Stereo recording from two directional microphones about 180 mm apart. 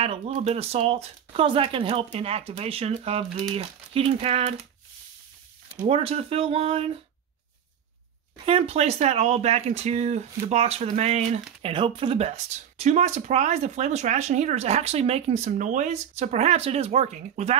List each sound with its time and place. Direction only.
0.0 s speech: 35° right (ahead or behind)
5.8 s speech: 35° right (ahead or behind)
8.5 s speech: 35° right (ahead or behind)